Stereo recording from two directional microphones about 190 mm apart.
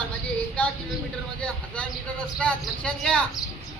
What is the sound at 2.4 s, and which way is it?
Speech, 5° left (ahead or behind).